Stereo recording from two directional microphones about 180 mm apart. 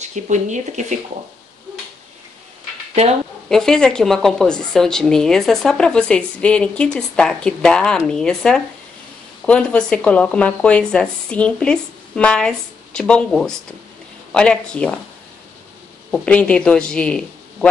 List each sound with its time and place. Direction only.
0.1 s speech: 40° right (ahead or behind)
3.4 s speech: 5° left (ahead or behind)
16.1 s speech: 5° left (ahead or behind)